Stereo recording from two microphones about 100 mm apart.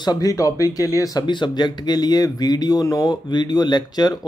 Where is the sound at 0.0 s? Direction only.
40° left (ahead or behind).